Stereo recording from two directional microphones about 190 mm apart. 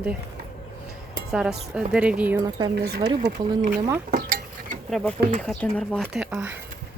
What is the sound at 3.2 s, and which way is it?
Speech, 45° right (ahead or behind).